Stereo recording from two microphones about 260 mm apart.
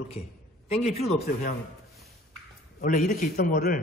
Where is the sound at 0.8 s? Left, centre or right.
Left.